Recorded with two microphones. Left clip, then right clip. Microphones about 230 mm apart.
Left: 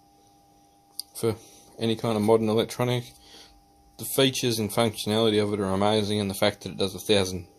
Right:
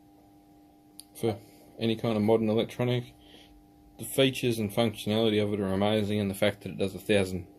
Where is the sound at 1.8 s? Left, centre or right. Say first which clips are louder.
Left 3 dB; left.